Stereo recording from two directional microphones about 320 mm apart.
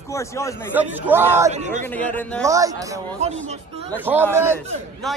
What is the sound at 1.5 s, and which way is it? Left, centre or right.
Speech, right.